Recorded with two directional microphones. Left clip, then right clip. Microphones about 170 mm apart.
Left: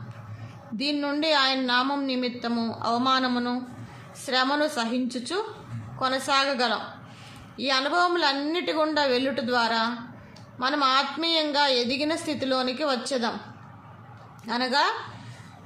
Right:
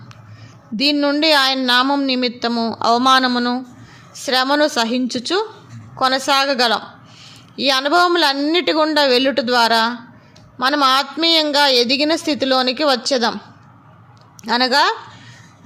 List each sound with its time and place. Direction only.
0.8 s speech: 50° right (ahead or behind)
14.4 s speech: 55° right (ahead or behind)